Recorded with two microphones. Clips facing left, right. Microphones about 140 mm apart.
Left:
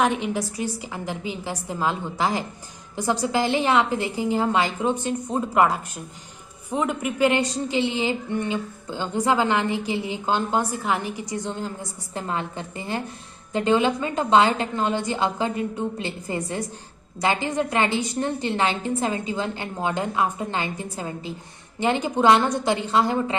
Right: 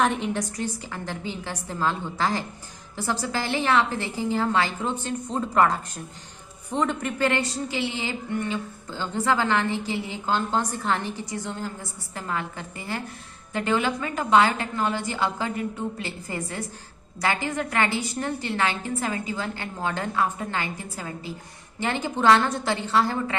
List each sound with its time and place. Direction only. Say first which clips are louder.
0.0 s a woman's voice: left 1 dB; centre (ahead or behind); by 23.4 s 20° left (ahead or behind)